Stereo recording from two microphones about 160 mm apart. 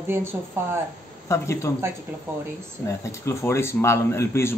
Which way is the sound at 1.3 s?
20° left (ahead or behind).